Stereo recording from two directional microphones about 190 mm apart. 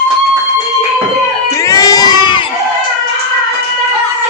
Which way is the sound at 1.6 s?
20° left (ahead or behind).